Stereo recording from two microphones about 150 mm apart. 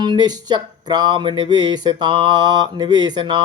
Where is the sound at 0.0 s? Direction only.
30° right (ahead or behind).